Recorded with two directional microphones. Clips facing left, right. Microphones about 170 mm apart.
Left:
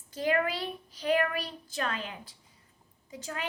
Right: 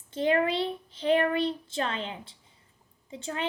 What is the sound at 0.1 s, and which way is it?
A woman's voice, 25° right (ahead or behind).